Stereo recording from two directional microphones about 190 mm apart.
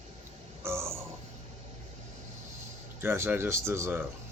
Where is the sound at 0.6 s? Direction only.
15° right (ahead or behind).